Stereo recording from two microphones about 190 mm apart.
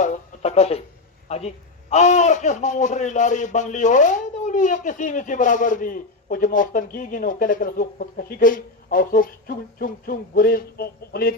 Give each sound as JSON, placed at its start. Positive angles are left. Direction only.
{"t": 0.0, "sound": "radio", "side_deg": 35}
{"t": 1.3, "sound": "a man's voice", "side_deg": 35}